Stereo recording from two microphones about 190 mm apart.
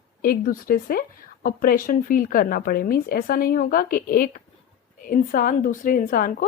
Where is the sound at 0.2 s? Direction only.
50° left (ahead or behind).